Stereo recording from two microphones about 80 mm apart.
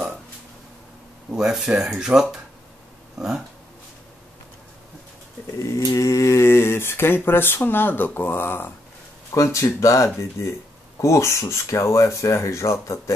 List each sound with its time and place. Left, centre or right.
1.3 s speech: centre
5.6 s speech: left
9.3 s speech: left